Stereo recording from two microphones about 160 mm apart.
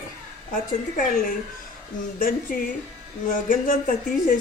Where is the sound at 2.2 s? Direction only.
60° left (ahead or behind).